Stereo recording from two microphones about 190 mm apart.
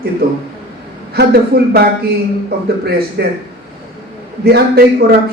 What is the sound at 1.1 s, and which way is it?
Speech, 55° right (ahead or behind).